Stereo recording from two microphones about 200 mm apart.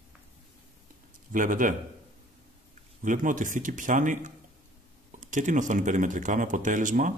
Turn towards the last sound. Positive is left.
turn(degrees=-40)  # may be behind; listen again after turning